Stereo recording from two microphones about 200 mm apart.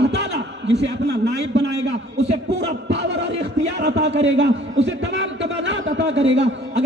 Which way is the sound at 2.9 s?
60° right (ahead or behind).